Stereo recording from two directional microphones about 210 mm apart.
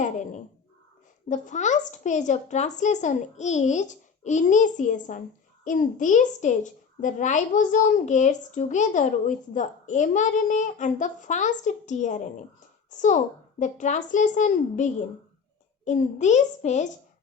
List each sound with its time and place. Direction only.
0.0 s crow: 35° left (ahead or behind)
1.3 s a child's voice: 35° left (ahead or behind)